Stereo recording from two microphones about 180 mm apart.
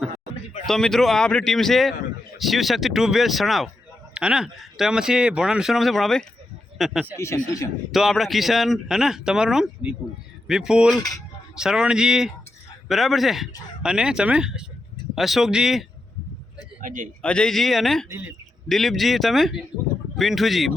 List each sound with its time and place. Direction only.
0.7 s speech: centre (ahead or behind)
7.2 s speech: 15° left (ahead or behind)
7.9 s speech: centre (ahead or behind)
16.8 s speech: 45° right (ahead or behind)
17.2 s speech: 5° left (ahead or behind)
18.7 s speech: centre (ahead or behind)